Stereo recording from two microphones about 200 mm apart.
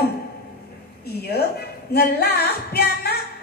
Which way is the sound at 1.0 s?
50° left (ahead or behind).